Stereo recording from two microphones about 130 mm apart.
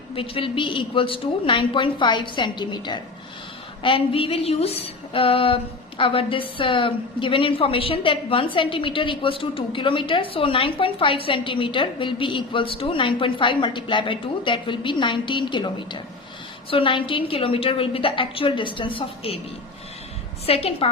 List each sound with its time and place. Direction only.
0.1 s a woman's voice: 45° left (ahead or behind)
20.5 s a woman's voice: 50° left (ahead or behind)